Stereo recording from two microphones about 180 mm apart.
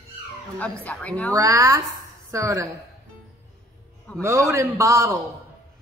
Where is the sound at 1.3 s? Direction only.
15° right (ahead or behind).